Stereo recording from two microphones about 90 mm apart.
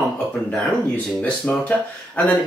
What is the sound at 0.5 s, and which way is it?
Speech, 15° left (ahead or behind).